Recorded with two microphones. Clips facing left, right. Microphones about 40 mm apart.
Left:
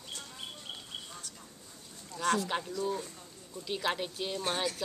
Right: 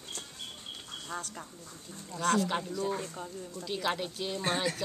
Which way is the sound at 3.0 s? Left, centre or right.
Right.